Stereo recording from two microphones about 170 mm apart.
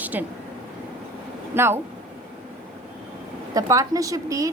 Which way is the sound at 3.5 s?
20° right (ahead or behind).